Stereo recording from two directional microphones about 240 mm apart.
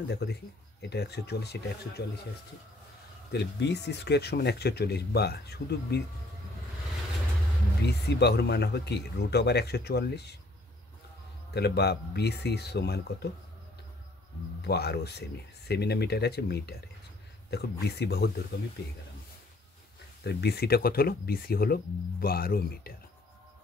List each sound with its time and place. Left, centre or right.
0.1 s speech: left
3.3 s speech: left
7.8 s speech: left
11.5 s speech: left
14.6 s speech: left
20.2 s speech: left